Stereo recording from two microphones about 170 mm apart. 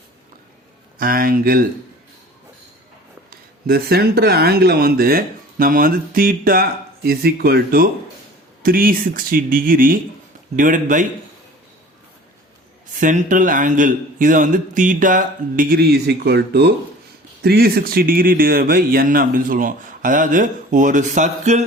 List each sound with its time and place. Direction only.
0.9 s speech: 60° right (ahead or behind)
3.2 s a man's voice: 65° right (ahead or behind); by 11.0 s 50° right (ahead or behind)
13.0 s a man's voice: 50° right (ahead or behind)